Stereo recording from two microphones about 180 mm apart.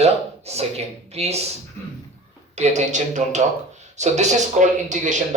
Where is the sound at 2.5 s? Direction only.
40° right (ahead or behind).